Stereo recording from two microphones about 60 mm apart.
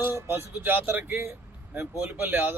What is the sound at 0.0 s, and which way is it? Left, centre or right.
A man's voice, right.